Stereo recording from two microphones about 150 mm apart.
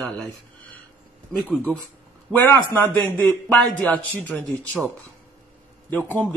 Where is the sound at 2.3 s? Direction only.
15° left (ahead or behind).